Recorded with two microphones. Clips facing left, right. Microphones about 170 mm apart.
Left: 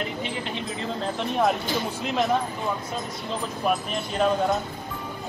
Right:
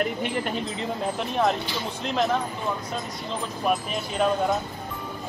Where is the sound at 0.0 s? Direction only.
50° right (ahead or behind).